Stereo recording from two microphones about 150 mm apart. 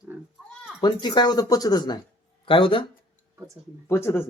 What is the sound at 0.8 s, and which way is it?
Speech, 30° left (ahead or behind).